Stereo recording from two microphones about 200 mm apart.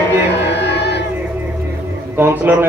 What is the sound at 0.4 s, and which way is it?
Music, 60° left (ahead or behind).